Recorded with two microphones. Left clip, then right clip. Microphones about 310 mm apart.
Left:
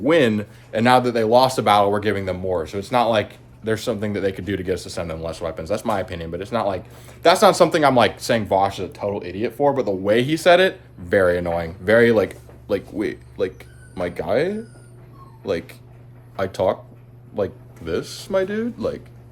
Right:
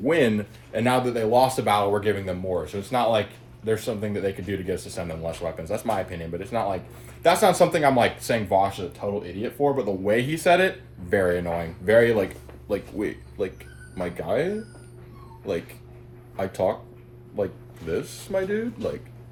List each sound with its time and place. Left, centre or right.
0.0 s speech: centre
16.3 s speech: centre